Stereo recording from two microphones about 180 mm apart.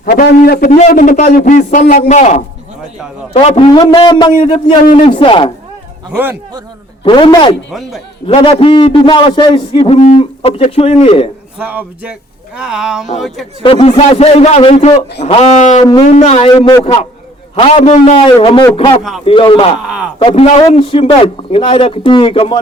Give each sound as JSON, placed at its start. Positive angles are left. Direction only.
{"t": 0.0, "sound": "a man's voice", "side_deg": 50}
{"t": 0.9, "sound": "a man's voice", "side_deg": 45}
{"t": 7.0, "sound": "a man's voice", "side_deg": 25}
{"t": 7.7, "sound": "speech", "side_deg": 0}
{"t": 8.3, "sound": "a man's voice", "side_deg": 30}
{"t": 11.6, "sound": "speech", "side_deg": -10}
{"t": 13.6, "sound": "a man's voice", "side_deg": 30}
{"t": 16.5, "sound": "a man's voice", "side_deg": 25}